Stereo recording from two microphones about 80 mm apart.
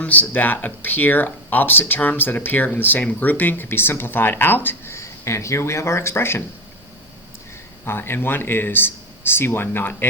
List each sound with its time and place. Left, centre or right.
0.0 s speech: left
7.9 s speech: left